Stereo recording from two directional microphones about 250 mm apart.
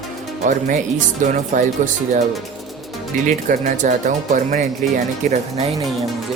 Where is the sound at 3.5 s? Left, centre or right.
Right.